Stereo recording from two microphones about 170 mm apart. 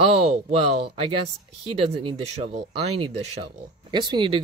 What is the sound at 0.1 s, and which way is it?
Speech, 40° right (ahead or behind).